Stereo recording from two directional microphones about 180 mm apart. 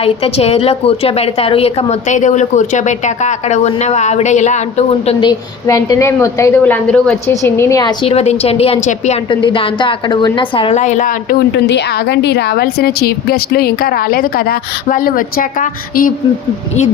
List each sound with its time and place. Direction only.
0.0 s a woman's voice: 35° left (ahead or behind); by 7.9 s 20° left (ahead or behind)
8.0 s a woman's voice: 35° left (ahead or behind)
9.3 s a woman's voice: 25° left (ahead or behind); by 11.3 s 45° left (ahead or behind)
11.5 s a woman's voice: 70° left (ahead or behind); by 16.1 s 50° left (ahead or behind)